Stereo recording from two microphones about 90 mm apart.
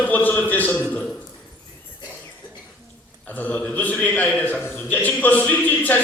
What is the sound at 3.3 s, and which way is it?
A man's voice, 15° left (ahead or behind).